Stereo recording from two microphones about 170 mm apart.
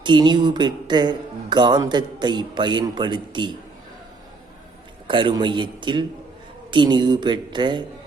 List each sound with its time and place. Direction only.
0.0 s speech: 25° right (ahead or behind)
5.0 s speech: 30° right (ahead or behind)